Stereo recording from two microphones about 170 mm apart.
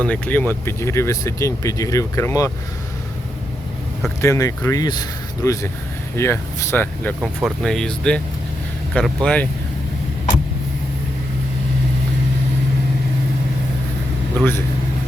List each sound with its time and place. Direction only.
0.0 s speech: 10° left (ahead or behind)
4.2 s speech: 15° left (ahead or behind)
7.2 s speech: 5° right (ahead or behind)
9.2 s speech: 10° left (ahead or behind)
14.3 s speech: 15° left (ahead or behind)